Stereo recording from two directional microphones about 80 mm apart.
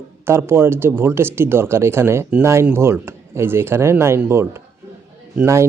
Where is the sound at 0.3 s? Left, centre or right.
Right.